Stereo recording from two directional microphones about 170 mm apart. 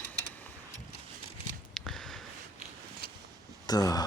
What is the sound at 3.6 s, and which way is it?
Speech, 20° left (ahead or behind).